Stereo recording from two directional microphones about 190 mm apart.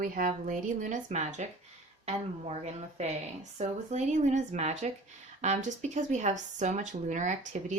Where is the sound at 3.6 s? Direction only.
40° right (ahead or behind).